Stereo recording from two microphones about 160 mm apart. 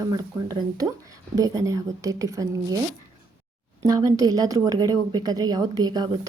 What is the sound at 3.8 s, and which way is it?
A woman's voice, 25° right (ahead or behind).